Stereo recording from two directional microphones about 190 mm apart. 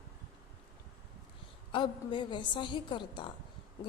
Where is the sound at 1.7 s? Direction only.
25° left (ahead or behind).